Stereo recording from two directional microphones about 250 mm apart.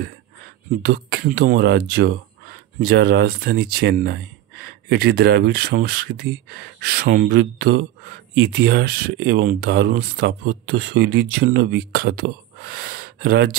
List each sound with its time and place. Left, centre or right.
0.7 s speech: right